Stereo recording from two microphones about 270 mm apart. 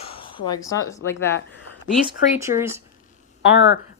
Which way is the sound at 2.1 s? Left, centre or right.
Centre.